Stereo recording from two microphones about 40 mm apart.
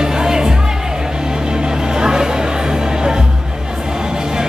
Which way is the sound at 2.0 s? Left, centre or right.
Centre.